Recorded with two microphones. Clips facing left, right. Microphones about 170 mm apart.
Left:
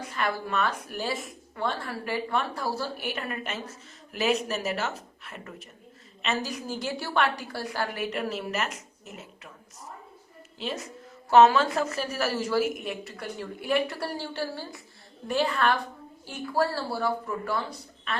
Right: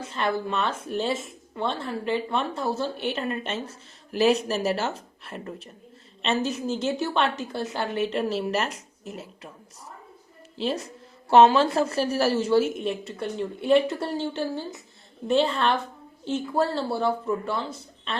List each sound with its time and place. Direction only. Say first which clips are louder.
0.0 s a woman's voice: right 3 dB; 25° right (ahead or behind)
10.6 s a woman's voice: right 6 dB; 30° right (ahead or behind)